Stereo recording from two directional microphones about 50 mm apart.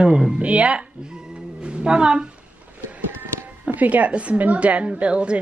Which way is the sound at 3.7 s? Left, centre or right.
Right.